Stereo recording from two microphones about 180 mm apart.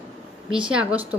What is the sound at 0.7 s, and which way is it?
Speech, 5° right (ahead or behind).